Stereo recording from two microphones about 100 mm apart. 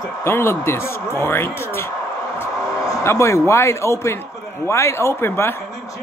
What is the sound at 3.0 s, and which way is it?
Speech, 30° left (ahead or behind).